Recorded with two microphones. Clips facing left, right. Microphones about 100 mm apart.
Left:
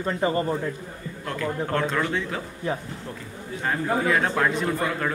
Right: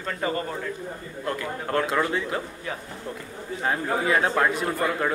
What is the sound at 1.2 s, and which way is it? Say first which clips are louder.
A man's voice: left 2 dB; 5° right (ahead or behind).